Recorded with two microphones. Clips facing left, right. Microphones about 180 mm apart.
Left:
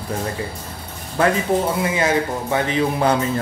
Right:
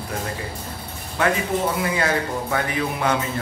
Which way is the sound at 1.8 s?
20° left (ahead or behind).